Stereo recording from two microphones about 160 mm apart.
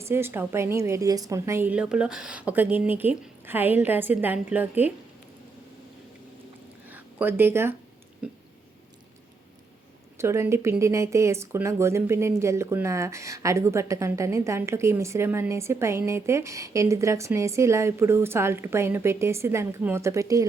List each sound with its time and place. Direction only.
0.0 s speech: 15° right (ahead or behind)
6.8 s a sound: 10° right (ahead or behind)
10.2 s speech: 15° right (ahead or behind)